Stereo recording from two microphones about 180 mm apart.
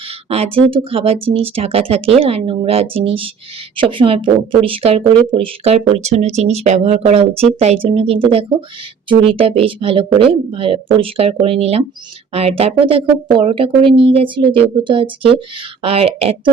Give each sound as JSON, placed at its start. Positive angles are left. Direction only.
{"t": 0.3, "sound": "speech", "side_deg": -35}